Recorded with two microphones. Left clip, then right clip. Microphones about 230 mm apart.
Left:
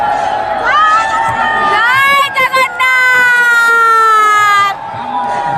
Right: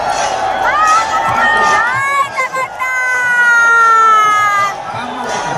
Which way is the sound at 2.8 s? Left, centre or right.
Left.